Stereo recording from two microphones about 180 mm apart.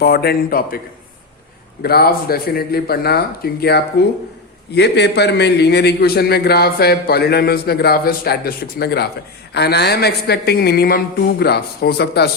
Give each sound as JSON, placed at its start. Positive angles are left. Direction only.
{"t": 0.0, "sound": "a man's voice", "side_deg": 60}
{"t": 1.8, "sound": "a man's voice", "side_deg": 60}